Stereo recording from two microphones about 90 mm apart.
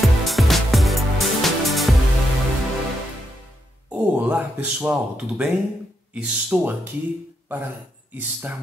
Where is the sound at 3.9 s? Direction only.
15° right (ahead or behind).